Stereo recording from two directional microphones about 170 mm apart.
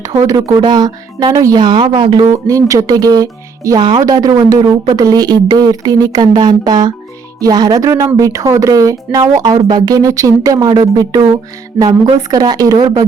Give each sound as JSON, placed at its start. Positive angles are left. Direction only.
{"t": 0.0, "sound": "speech", "side_deg": -20}